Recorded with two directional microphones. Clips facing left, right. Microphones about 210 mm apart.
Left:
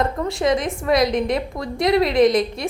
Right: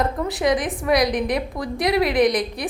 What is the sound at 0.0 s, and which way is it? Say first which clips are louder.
A woman's voice: left 1 dB; centre (ahead or behind).